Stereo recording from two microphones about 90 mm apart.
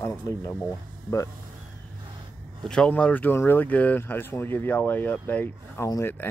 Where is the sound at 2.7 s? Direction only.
10° left (ahead or behind).